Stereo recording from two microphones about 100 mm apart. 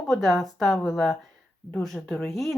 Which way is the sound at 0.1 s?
Centre (ahead or behind).